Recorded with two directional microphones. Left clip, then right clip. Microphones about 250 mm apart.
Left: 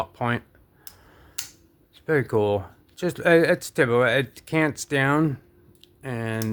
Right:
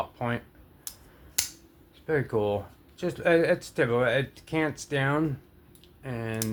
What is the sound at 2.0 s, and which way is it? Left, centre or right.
Speech, left.